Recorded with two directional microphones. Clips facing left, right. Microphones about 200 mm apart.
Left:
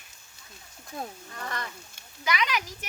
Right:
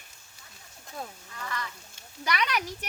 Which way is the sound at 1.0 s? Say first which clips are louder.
Left 2 dB; 45° left (ahead or behind).